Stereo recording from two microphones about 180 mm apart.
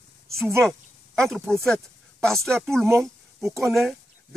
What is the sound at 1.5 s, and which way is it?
Speech, 5° left (ahead or behind).